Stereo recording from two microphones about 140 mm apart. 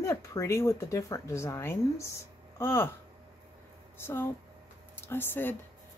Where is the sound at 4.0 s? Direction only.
15° left (ahead or behind).